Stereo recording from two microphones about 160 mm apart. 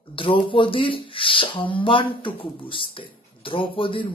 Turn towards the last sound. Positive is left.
turn(degrees=35)  # may be behind; listen again after turning